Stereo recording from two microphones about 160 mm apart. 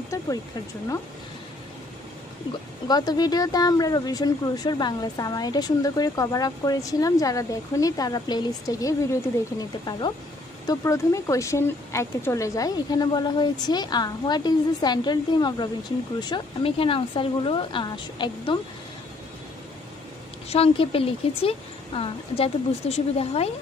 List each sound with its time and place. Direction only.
0.1 s speech: 20° left (ahead or behind)
2.9 s speech: 25° left (ahead or behind)
20.4 s speech: 35° left (ahead or behind)